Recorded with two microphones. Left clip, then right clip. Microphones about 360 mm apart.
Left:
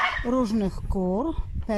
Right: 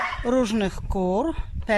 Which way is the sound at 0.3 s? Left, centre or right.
Right.